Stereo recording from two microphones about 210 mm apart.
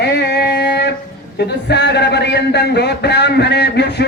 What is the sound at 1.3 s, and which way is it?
A man's voice, 55° left (ahead or behind).